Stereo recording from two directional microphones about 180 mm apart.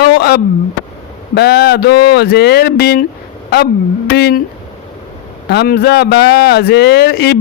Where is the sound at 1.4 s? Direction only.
60° left (ahead or behind).